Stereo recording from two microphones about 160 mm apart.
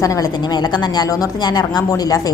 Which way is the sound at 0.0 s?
20° left (ahead or behind).